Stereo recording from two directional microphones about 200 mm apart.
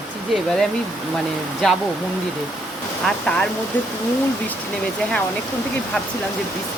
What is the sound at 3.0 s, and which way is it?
Speech, 5° left (ahead or behind).